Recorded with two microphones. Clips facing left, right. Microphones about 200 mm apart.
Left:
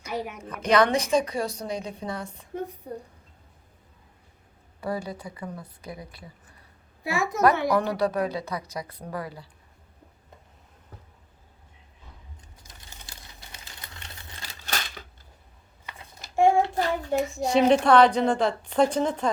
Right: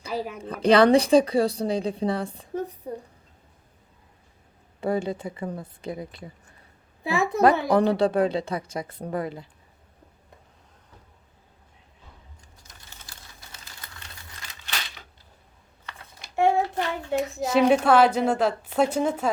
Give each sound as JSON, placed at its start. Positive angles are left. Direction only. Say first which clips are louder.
{"t": 0.0, "sound": "a woman's voice", "louder": "right 2 dB", "side_deg": -30}
{"t": 4.8, "sound": "a woman's voice", "louder": "right 5 dB", "side_deg": -25}
{"t": 7.3, "sound": "a woman's voice", "louder": "right 2 dB", "side_deg": -30}
{"t": 13.0, "sound": "a sound", "louder": "left 1 dB", "side_deg": 15}
{"t": 14.6, "sound": "a sound", "louder": "left 3 dB", "side_deg": 45}
{"t": 16.7, "sound": "child singing", "louder": "left 2 dB", "side_deg": 40}
{"t": 17.2, "sound": "a woman's voice", "louder": "right 1 dB", "side_deg": 0}